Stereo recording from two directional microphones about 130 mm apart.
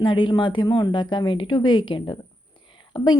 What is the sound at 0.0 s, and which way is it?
Speech, 35° left (ahead or behind).